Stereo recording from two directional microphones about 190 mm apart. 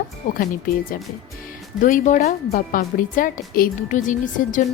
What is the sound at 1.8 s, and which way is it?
A woman's voice, 40° left (ahead or behind).